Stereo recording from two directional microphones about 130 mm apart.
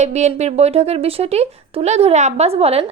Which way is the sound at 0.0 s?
60° right (ahead or behind).